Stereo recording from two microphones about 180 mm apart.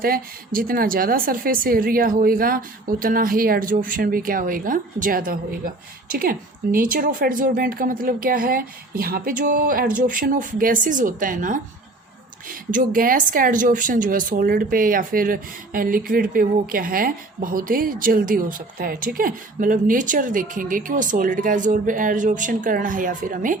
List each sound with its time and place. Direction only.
0.0 s speech: 55° right (ahead or behind)